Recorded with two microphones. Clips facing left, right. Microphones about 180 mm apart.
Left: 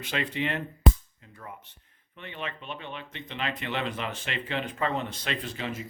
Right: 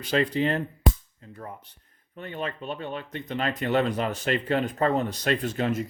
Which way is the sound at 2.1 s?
40° right (ahead or behind).